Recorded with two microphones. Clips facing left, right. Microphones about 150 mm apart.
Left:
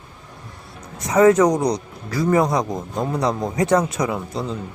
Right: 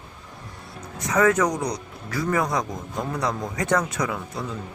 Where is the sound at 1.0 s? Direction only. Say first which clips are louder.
Left 6 dB; 25° left (ahead or behind).